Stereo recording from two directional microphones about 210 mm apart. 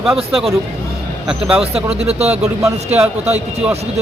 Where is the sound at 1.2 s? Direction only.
5° right (ahead or behind).